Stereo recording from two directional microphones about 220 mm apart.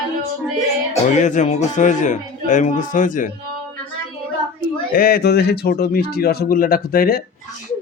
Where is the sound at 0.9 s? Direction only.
35° left (ahead or behind).